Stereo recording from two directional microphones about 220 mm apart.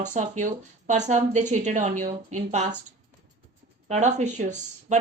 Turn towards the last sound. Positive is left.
turn(degrees=-35)  # may be behind; listen again after turning